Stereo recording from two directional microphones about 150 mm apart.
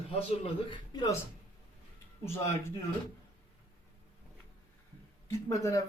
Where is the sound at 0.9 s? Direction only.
25° left (ahead or behind).